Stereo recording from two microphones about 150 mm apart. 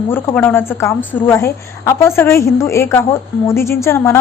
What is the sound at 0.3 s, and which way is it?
A woman's voice, 15° left (ahead or behind).